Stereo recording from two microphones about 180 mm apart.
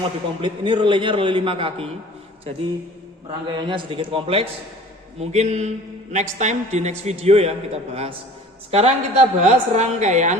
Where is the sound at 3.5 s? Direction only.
25° right (ahead or behind).